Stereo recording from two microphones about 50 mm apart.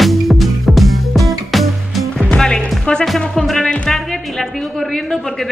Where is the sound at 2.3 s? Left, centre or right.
Centre.